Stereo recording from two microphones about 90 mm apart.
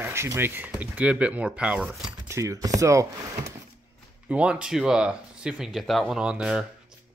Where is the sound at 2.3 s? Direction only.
35° right (ahead or behind).